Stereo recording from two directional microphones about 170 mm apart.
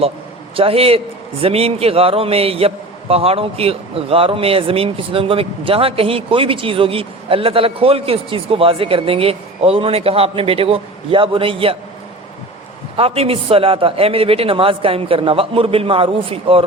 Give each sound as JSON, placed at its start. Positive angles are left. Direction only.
{"t": 0.5, "sound": "a man's voice", "side_deg": -35}
{"t": 13.0, "sound": "a man's voice", "side_deg": -35}